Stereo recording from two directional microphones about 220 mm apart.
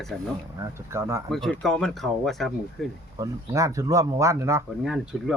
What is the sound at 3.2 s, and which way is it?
A man's voice, 15° right (ahead or behind).